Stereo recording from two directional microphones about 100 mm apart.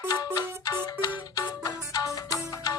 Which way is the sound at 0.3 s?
40° left (ahead or behind).